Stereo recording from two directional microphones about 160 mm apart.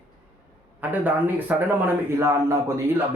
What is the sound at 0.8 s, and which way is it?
Speech, 10° right (ahead or behind).